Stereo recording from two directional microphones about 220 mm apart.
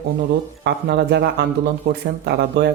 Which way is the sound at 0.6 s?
50° right (ahead or behind).